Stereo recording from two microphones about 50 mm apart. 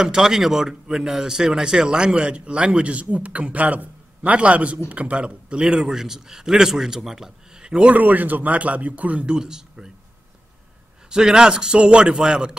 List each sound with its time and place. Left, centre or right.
0.0 s a man's voice: centre
7.8 s speech: right
9.3 s speech: centre
11.1 s a man's voice: centre